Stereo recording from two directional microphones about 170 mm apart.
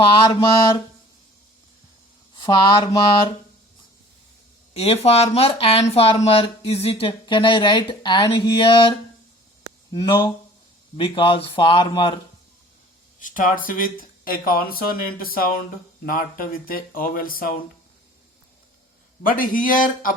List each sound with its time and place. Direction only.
0.1 s mantra: 30° left (ahead or behind)
2.3 s speech: 25° left (ahead or behind)
4.7 s speech: 35° left (ahead or behind)
9.9 s mantra: 25° left (ahead or behind)
10.9 s speech: 30° left (ahead or behind)
13.1 s speech: 50° left (ahead or behind)
19.2 s speech: 55° left (ahead or behind)